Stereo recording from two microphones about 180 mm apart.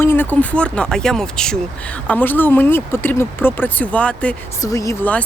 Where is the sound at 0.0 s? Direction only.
10° left (ahead or behind).